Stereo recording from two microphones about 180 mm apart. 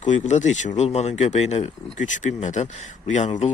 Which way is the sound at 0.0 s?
40° left (ahead or behind).